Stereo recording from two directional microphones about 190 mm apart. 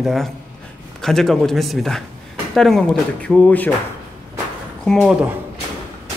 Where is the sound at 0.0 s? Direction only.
Centre (ahead or behind).